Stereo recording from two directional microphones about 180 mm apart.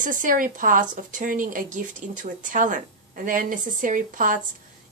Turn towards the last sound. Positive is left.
turn(degrees=-45)  # may be behind; listen again after turning